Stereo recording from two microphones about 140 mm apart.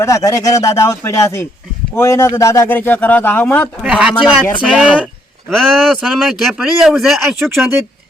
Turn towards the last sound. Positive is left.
turn(degrees=0)  # may be behind; listen again after turning